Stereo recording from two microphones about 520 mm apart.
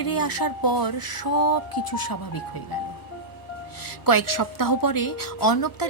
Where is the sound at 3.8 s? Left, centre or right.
Left.